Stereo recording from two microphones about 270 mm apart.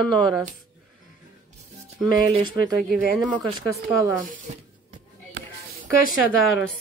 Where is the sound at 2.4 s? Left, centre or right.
Centre.